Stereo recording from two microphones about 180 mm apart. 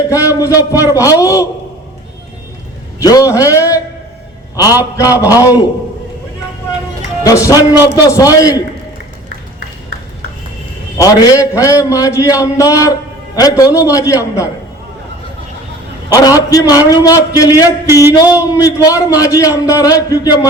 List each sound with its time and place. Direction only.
0.1 s a man's voice: 20° left (ahead or behind)
3.0 s a man's voice: 20° left (ahead or behind)
7.3 s a man's voice: 20° left (ahead or behind)
10.9 s a man's voice: 20° left (ahead or behind)
16.0 s a man's voice: 20° left (ahead or behind)